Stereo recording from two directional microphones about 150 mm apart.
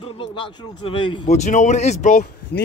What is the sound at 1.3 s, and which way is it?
Speech, 50° left (ahead or behind).